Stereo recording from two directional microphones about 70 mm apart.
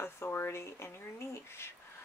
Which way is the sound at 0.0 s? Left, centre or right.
Left.